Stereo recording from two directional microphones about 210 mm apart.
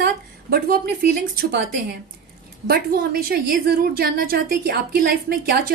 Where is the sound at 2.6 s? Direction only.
45° right (ahead or behind).